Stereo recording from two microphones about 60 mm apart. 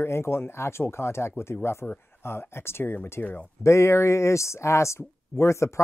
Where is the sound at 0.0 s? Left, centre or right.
Left.